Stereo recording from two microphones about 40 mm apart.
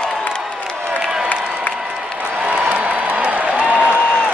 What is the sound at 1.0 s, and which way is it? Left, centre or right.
Crowd, centre.